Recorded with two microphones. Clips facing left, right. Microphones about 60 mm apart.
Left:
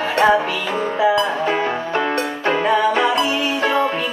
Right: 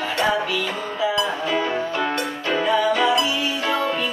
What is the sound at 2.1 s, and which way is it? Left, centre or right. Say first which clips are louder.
Music: left 4 dB; left.